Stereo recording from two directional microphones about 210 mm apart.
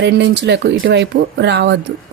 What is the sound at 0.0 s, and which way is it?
Speech, 55° right (ahead or behind).